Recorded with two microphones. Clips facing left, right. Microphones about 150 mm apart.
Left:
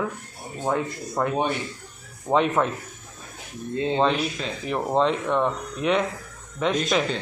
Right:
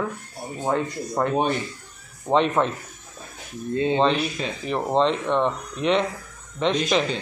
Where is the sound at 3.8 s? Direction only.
15° right (ahead or behind).